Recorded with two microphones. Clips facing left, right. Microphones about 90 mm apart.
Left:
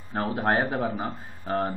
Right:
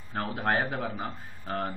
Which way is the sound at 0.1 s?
15° left (ahead or behind).